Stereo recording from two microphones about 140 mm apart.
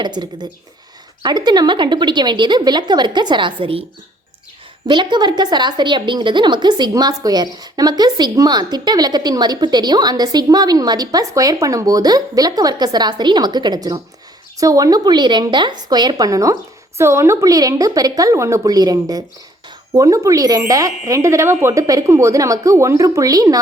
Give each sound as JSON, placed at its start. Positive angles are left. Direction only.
{"t": 0.0, "sound": "speech", "side_deg": -30}
{"t": 4.9, "sound": "a woman's voice", "side_deg": -35}